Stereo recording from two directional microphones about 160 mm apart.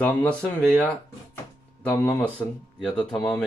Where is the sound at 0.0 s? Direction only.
10° left (ahead or behind).